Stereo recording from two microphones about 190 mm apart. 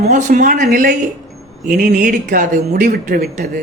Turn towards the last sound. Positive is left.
turn(degrees=-45)  # may be behind; listen again after turning